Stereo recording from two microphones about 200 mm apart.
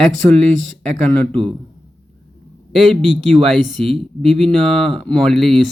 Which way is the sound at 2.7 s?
Centre (ahead or behind).